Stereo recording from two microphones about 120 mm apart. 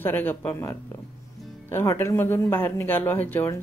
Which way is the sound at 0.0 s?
15° left (ahead or behind).